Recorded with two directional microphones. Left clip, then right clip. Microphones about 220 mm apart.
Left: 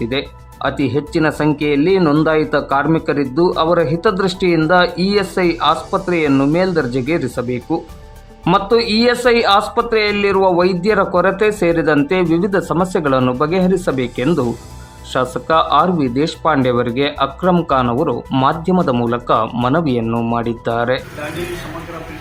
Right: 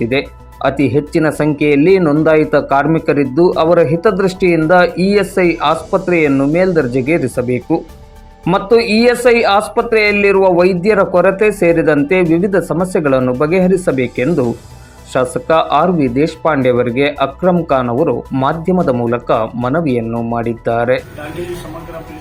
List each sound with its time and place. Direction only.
0.0 s speech: 5° right (ahead or behind)
20.1 s speech: 15° left (ahead or behind)
20.3 s speech: centre (ahead or behind)